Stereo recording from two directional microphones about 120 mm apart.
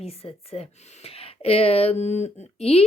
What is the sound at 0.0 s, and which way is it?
Speech, 55° left (ahead or behind).